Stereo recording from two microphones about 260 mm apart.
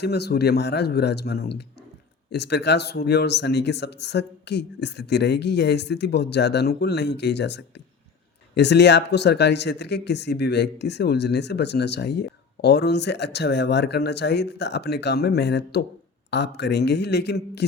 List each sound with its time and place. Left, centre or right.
0.0 s speech: left